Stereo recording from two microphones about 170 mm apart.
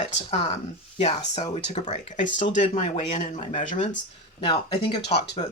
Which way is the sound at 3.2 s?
50° left (ahead or behind).